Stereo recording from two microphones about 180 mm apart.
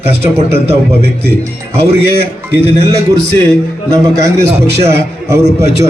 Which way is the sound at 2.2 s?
35° right (ahead or behind).